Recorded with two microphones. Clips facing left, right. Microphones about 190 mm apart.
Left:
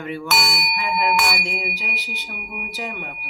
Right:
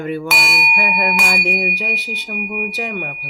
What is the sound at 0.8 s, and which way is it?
Speech, 55° right (ahead or behind).